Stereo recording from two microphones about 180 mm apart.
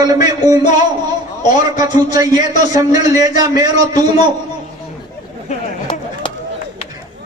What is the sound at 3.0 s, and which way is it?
Speech, 20° right (ahead or behind).